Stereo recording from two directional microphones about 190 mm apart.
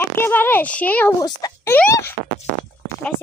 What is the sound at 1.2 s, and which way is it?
Speech, 20° left (ahead or behind).